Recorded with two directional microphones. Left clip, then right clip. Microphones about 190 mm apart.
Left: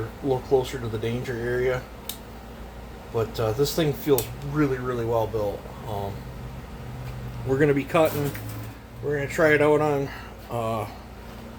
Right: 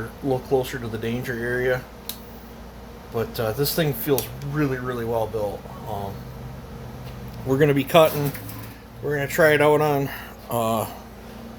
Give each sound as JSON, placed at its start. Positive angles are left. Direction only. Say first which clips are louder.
{"t": 0.3, "sound": "speech", "louder": "even", "side_deg": -25}
{"t": 3.2, "sound": "speech", "louder": "even", "side_deg": -25}
{"t": 7.4, "sound": "speech", "louder": "right 2 dB", "side_deg": -25}
{"t": 7.7, "sound": "speech", "louder": "right 7 dB", "side_deg": -40}
{"t": 9.1, "sound": "speech", "louder": "right 3 dB", "side_deg": -35}